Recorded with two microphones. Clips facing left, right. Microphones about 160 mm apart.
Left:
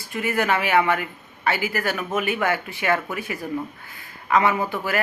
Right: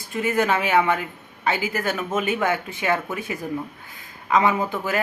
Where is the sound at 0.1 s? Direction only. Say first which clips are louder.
Right 1 dB; 20° right (ahead or behind).